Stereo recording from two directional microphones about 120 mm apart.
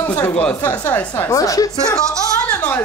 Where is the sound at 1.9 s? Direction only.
10° left (ahead or behind).